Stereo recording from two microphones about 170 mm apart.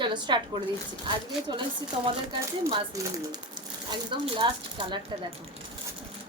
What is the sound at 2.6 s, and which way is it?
Speech, 20° right (ahead or behind).